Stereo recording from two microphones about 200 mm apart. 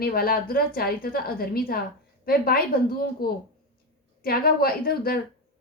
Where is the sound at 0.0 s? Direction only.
50° left (ahead or behind).